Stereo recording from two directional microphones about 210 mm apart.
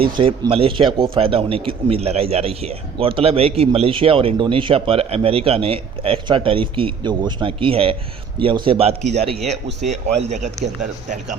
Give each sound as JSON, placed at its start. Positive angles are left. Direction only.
{"t": 0.0, "sound": "a man's voice", "side_deg": -25}
{"t": 9.3, "sound": "speech", "side_deg": 0}
{"t": 10.2, "sound": "speech", "side_deg": -30}